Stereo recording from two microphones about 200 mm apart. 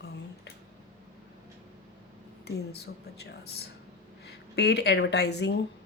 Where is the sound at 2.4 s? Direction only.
55° left (ahead or behind).